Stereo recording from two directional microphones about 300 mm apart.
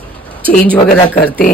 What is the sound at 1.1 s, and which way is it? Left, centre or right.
Speech, left.